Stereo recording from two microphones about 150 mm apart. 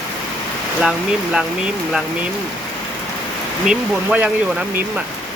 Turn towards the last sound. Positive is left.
turn(degrees=-10)  # may be behind; listen again after turning